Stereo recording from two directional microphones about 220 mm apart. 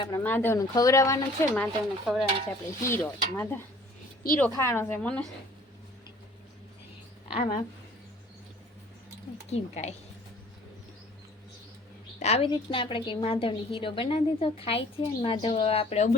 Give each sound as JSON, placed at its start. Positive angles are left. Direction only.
{"t": 0.0, "sound": "a woman's voice", "side_deg": 10}
{"t": 2.0, "sound": "stir", "side_deg": 0}
{"t": 2.8, "sound": "a woman's voice", "side_deg": 10}
{"t": 7.3, "sound": "speech", "side_deg": 35}
{"t": 9.5, "sound": "a woman's voice", "side_deg": 30}
{"t": 12.2, "sound": "a woman's voice", "side_deg": 25}